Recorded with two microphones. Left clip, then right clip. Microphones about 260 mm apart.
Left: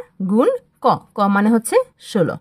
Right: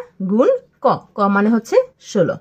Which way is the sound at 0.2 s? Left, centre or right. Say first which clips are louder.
Right 2 dB; left.